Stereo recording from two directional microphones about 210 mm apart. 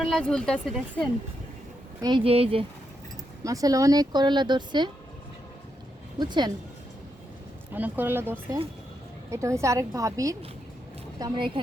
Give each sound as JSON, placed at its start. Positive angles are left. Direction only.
{"t": 0.0, "sound": "speech", "side_deg": 0}
{"t": 2.0, "sound": "speech", "side_deg": -20}
{"t": 3.4, "sound": "speech", "side_deg": -15}
{"t": 6.1, "sound": "speech", "side_deg": -20}
{"t": 7.7, "sound": "a woman's voice", "side_deg": -10}